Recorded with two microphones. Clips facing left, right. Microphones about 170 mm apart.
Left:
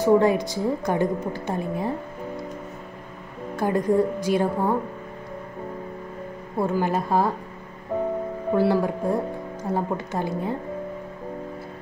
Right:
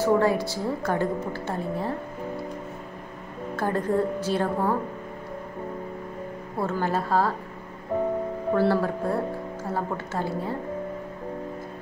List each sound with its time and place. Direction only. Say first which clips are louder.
0.0 s a woman's voice: left 3 dB; 15° left (ahead or behind)
3.5 s a woman's voice: left 4 dB; 15° left (ahead or behind)
6.6 s a woman's voice: left 3 dB; 15° left (ahead or behind)
8.5 s a woman's voice: left 2 dB; 15° left (ahead or behind)